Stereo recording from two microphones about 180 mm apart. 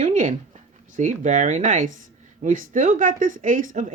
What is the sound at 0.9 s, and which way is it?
Speech, 45° right (ahead or behind).